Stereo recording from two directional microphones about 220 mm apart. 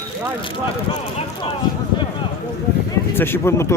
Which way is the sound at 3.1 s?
10° left (ahead or behind).